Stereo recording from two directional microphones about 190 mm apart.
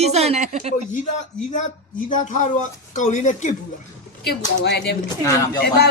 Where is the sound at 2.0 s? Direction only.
40° left (ahead or behind).